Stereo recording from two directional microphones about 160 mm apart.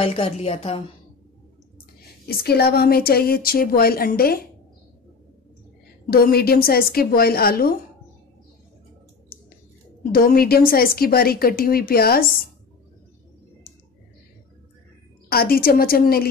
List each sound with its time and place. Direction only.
0.0 s a woman's voice: 35° left (ahead or behind)
2.2 s a woman's voice: 80° left
6.0 s a woman's voice: 70° left (ahead or behind)
10.1 s a woman's voice: 65° left (ahead or behind)
15.2 s a woman's voice: 70° left (ahead or behind)